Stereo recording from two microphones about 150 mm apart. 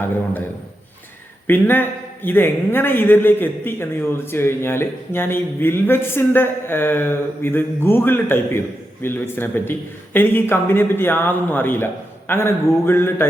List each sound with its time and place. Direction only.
1.5 s a man's voice: 15° left (ahead or behind)